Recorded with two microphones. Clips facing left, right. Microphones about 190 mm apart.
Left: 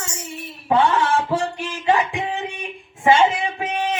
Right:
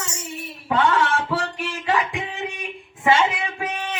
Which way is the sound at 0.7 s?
20° left (ahead or behind).